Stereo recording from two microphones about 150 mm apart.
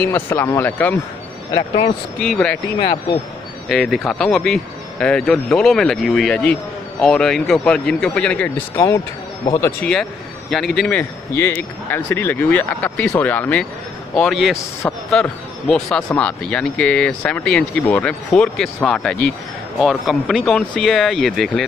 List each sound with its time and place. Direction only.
0.3 s speech: 15° left (ahead or behind)
2.1 s speech: 5° left (ahead or behind)
2.8 s speech: 35° left (ahead or behind)
3.6 s speech: 5° left (ahead or behind)
8.7 s speech: 20° left (ahead or behind)
10.5 s speech: centre (ahead or behind)